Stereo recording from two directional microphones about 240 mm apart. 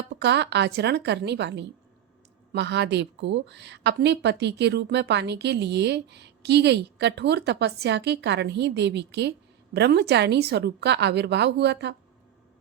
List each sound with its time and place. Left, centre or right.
0.2 s a woman's voice: right